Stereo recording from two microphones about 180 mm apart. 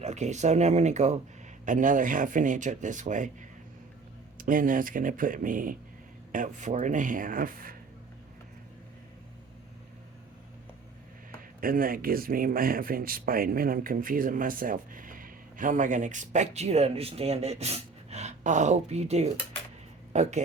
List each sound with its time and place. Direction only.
0.0 s speech: 40° right (ahead or behind)
4.4 s speech: 50° right (ahead or behind)
11.6 s speech: 50° right (ahead or behind)